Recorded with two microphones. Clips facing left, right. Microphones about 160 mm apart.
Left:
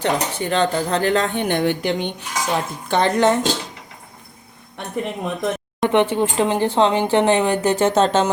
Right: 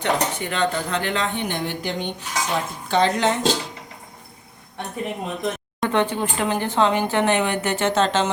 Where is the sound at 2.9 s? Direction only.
55° left (ahead or behind).